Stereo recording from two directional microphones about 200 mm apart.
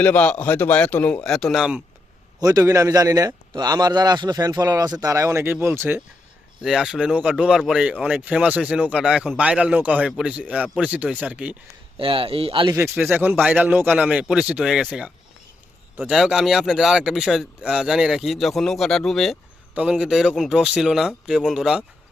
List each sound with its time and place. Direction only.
0.0 s a man's voice: 5° left (ahead or behind)
2.4 s a man's voice: 15° right (ahead or behind)
11.9 s speech: 25° right (ahead or behind)
12.7 s a man's voice: 10° right (ahead or behind)